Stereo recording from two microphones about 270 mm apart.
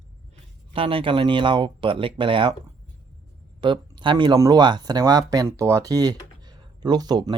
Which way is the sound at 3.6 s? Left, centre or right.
Centre.